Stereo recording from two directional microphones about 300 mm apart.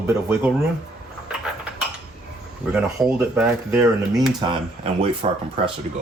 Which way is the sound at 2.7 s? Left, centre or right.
Centre.